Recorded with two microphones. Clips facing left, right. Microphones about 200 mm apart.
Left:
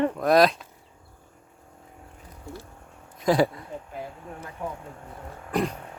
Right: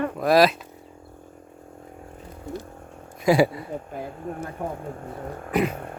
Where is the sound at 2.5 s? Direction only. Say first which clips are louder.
Right 6 dB; 20° right (ahead or behind).